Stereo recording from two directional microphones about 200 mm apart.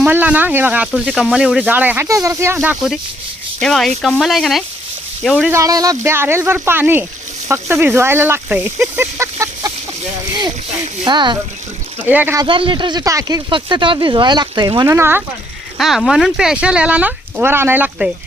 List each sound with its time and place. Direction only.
0.0 s speech: 10° right (ahead or behind)
5.5 s speech: 15° right (ahead or behind)
11.0 s speech: 20° right (ahead or behind)
12.0 s speech: 10° right (ahead or behind)
12.5 s speech: 25° right (ahead or behind)
15.8 s speech: centre (ahead or behind)